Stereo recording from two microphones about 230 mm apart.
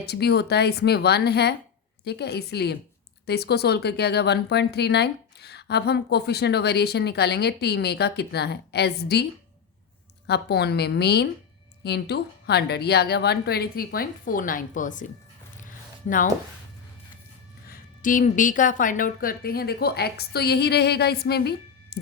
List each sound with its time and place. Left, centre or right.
0.0 s speech: left
10.2 s speech: left
17.7 s speech: left